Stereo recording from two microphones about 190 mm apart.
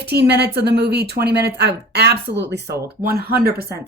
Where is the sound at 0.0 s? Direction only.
60° right (ahead or behind).